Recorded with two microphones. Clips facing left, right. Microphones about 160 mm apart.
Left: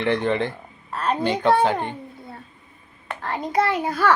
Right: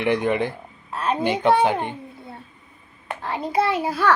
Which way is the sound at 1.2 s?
20° right (ahead or behind).